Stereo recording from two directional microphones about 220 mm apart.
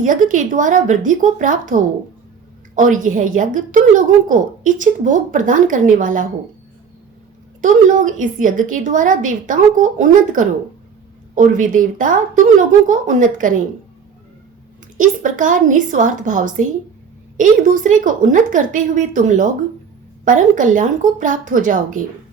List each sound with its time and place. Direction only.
0.0 s a woman's voice: 35° right (ahead or behind)
7.6 s a woman's voice: 35° right (ahead or behind)
14.9 s a woman's voice: 35° right (ahead or behind)